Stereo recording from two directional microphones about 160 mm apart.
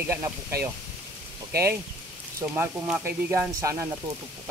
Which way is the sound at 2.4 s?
10° right (ahead or behind).